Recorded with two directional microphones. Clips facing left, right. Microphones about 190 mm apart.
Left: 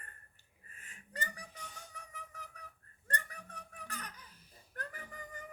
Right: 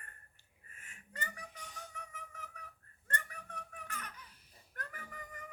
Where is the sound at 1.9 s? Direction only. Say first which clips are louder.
Right 1 dB; 35° left (ahead or behind).